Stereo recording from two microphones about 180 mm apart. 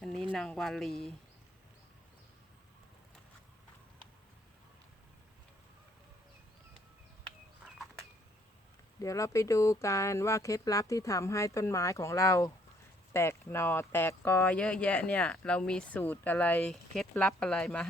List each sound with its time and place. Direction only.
0.3 s speech: 5° left (ahead or behind)
9.0 s speech: 15° left (ahead or behind)